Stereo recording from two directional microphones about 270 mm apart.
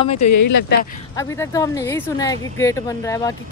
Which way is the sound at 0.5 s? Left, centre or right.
Left.